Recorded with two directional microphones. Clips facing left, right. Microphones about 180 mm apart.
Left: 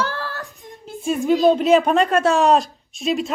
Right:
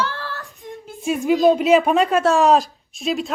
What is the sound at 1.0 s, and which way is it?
Speech, 5° right (ahead or behind).